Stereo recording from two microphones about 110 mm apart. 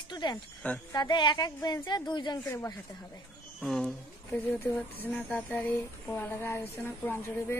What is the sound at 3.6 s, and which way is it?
Speech, 5° left (ahead or behind).